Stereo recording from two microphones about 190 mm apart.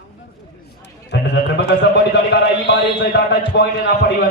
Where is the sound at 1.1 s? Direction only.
60° left (ahead or behind).